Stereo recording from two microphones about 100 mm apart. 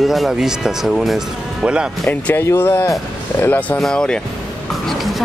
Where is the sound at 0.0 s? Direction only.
Centre (ahead or behind).